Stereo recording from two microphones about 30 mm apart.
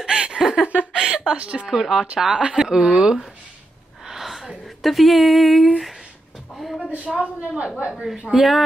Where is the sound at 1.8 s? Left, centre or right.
Centre.